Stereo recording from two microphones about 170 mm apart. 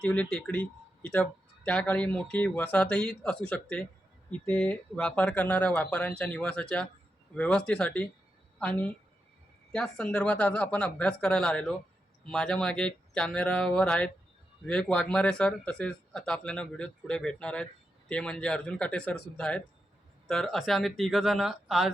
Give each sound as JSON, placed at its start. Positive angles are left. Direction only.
{"t": 0.0, "sound": "a woman's voice", "side_deg": 5}